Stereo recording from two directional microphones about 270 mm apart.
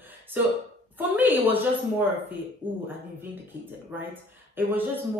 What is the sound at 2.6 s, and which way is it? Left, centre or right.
Speech, centre.